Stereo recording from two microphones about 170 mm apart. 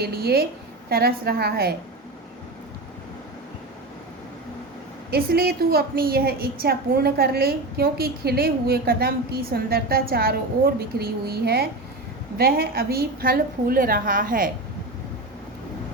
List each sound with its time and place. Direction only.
0.0 s a woman's voice: 65° right (ahead or behind)
5.1 s a woman's voice: 65° right (ahead or behind)